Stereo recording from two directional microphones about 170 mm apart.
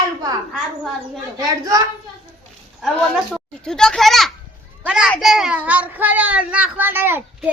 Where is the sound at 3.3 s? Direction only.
5° left (ahead or behind).